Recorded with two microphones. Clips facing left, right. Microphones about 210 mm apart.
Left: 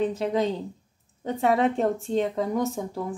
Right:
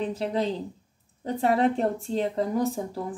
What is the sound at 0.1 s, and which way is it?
A woman's voice, 30° right (ahead or behind).